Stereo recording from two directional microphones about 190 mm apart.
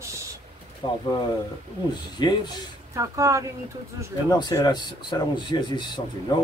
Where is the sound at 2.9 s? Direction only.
15° right (ahead or behind).